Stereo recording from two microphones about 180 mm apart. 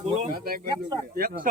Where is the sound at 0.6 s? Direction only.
20° right (ahead or behind).